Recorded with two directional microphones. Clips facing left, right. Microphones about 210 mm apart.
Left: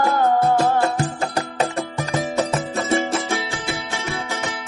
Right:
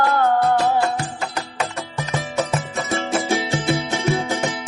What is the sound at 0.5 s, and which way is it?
Music, 45° left (ahead or behind).